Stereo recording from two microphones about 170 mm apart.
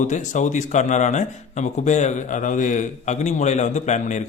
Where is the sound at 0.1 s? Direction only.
45° left (ahead or behind).